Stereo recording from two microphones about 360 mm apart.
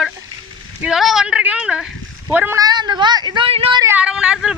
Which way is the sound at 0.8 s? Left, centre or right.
Centre.